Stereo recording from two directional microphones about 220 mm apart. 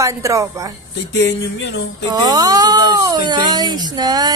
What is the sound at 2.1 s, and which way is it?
A woman's voice, 15° right (ahead or behind).